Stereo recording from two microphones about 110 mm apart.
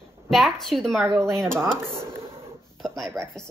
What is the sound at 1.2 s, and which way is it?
Speech, 25° right (ahead or behind).